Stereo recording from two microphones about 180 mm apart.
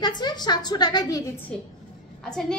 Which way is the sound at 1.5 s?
5° left (ahead or behind).